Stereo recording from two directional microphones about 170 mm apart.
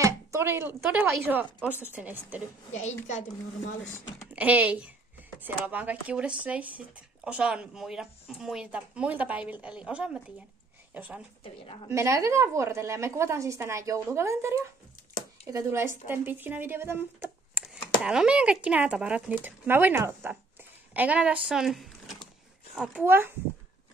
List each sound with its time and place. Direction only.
0.0 s speech: 15° right (ahead or behind)
2.7 s a woman's voice: 40° left (ahead or behind)
4.4 s speech: 10° right (ahead or behind)
11.4 s a woman's voice: 30° left (ahead or behind)
11.9 s speech: 15° right (ahead or behind)